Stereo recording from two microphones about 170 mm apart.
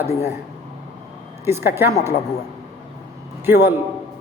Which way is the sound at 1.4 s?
15° right (ahead or behind).